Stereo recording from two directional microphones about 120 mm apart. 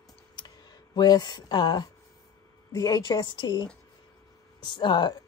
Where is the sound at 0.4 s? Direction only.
35° left (ahead or behind).